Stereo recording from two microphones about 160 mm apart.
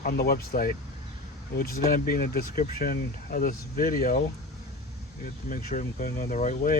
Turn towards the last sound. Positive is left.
turn(degrees=55)  # may be behind; listen again after turning